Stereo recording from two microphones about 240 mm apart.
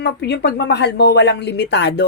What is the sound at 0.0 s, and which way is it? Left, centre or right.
Speech, left.